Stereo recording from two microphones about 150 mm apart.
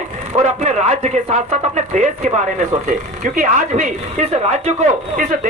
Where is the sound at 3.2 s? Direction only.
60° right (ahead or behind).